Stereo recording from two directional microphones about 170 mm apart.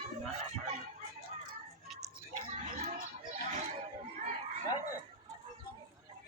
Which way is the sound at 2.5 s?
50° right (ahead or behind).